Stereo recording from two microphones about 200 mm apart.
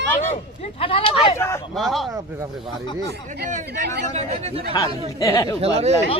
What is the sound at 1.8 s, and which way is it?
Speech, centre (ahead or behind).